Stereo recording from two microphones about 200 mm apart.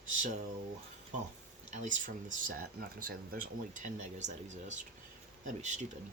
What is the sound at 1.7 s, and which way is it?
Speech, 40° right (ahead or behind).